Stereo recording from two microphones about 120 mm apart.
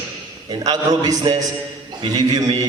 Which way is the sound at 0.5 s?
35° right (ahead or behind).